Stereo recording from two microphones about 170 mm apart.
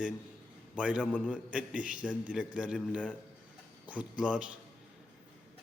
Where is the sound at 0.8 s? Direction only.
5° right (ahead or behind).